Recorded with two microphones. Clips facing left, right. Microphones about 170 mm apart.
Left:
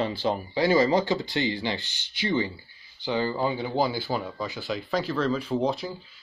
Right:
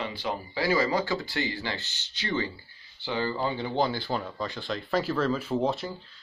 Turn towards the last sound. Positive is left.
turn(degrees=0)  # may be behind; listen again after turning